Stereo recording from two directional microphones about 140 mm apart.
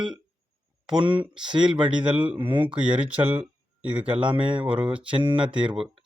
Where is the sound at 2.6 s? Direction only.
35° right (ahead or behind).